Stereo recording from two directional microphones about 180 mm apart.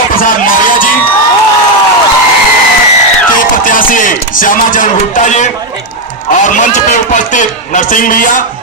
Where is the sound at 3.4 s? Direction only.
50° left (ahead or behind).